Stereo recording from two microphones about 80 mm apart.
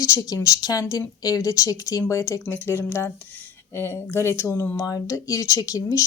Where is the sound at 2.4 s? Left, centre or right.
Left.